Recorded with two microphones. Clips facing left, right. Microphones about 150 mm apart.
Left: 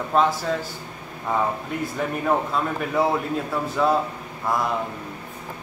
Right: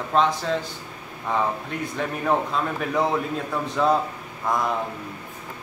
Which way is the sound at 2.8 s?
5° left (ahead or behind).